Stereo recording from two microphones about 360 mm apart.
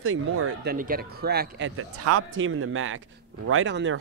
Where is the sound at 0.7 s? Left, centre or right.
Right.